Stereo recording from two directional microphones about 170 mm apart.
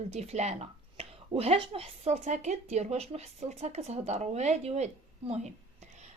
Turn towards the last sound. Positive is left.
turn(degrees=-40)  # may be behind; listen again after turning